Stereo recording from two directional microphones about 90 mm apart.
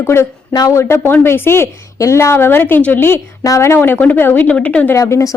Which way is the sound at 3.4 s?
35° left (ahead or behind).